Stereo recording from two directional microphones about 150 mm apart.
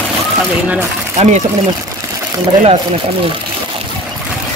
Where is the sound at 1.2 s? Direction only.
50° right (ahead or behind).